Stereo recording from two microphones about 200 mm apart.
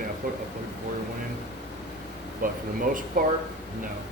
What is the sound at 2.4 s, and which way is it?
Speech, 40° right (ahead or behind).